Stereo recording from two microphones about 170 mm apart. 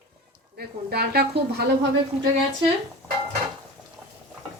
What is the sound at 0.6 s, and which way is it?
Speech, 70° right (ahead or behind).